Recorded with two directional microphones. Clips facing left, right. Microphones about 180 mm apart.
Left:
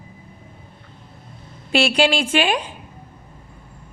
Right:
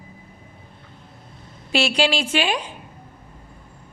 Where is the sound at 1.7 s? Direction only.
55° left (ahead or behind).